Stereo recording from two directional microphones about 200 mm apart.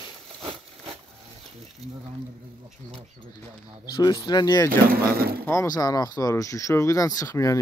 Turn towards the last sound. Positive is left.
turn(degrees=15)  # may be behind; listen again after turning